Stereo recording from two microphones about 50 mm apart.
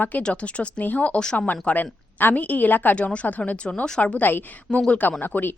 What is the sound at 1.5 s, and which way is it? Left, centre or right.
Speech, left.